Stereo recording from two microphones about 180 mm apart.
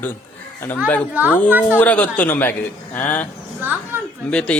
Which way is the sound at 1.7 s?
10° left (ahead or behind).